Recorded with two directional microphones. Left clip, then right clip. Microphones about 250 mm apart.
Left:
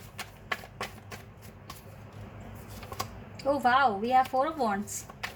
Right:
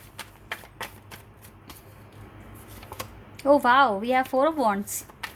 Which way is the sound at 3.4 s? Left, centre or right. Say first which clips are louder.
Right 6 dB; right.